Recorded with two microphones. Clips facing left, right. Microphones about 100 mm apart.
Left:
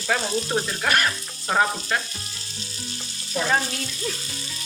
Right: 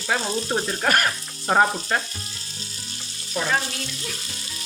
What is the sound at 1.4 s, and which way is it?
Frying, 25° right (ahead or behind).